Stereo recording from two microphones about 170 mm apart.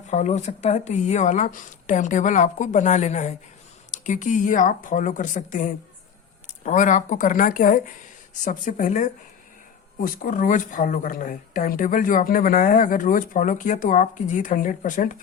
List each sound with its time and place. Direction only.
0.1 s speech: 45° left (ahead or behind)